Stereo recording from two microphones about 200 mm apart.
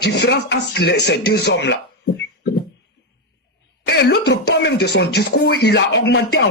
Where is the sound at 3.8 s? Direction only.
55° left (ahead or behind).